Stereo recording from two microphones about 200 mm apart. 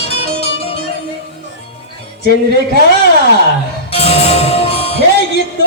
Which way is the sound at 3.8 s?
30° left (ahead or behind).